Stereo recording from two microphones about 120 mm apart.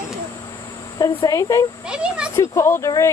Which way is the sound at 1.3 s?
25° left (ahead or behind).